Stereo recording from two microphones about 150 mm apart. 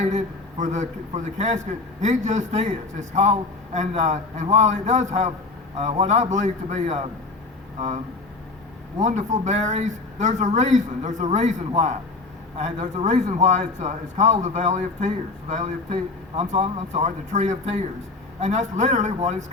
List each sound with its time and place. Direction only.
0.6 s a man's voice: 50° right (ahead or behind)
9.0 s a man's voice: 50° right (ahead or behind)